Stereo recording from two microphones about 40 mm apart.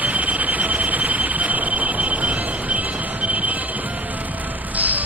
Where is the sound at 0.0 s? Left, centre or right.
Right.